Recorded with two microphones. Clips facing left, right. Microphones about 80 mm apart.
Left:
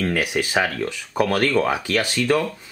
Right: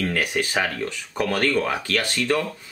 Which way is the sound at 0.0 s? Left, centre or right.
Centre.